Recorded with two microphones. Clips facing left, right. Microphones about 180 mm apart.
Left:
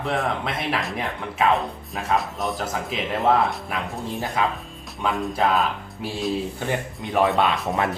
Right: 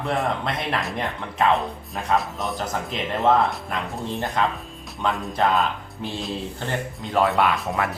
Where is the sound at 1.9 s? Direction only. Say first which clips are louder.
Right 1 dB; centre (ahead or behind).